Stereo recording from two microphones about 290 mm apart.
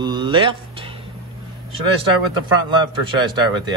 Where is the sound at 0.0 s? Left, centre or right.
Centre.